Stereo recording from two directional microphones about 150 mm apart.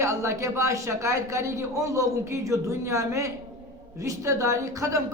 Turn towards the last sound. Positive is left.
turn(degrees=-20)  # may be behind; listen again after turning